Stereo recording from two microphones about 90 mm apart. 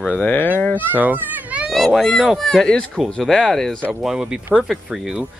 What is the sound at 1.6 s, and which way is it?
Speech, centre (ahead or behind).